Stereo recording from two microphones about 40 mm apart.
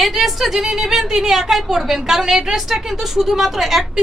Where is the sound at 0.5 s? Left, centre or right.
Centre.